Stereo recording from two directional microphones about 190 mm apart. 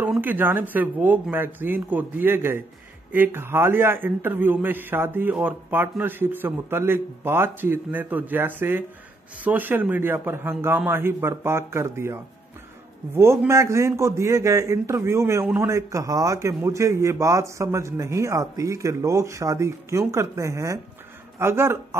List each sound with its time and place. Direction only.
0.0 s a man's voice: 10° right (ahead or behind)